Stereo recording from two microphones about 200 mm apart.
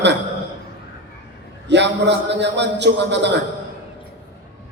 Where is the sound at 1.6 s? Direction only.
60° right (ahead or behind).